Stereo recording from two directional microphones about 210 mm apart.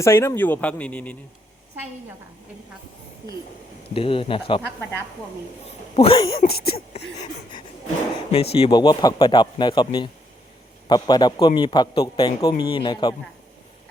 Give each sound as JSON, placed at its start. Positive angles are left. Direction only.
{"t": 0.0, "sound": "a man's voice", "side_deg": 10}
{"t": 3.9, "sound": "a man's voice", "side_deg": 25}
{"t": 6.0, "sound": "a man's voice", "side_deg": 25}